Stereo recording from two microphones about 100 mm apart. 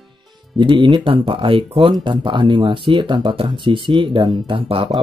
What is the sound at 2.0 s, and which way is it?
Speech, 55° right (ahead or behind).